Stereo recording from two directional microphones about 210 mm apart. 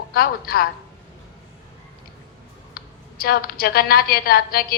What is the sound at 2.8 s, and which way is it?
A woman's voice, 45° left (ahead or behind).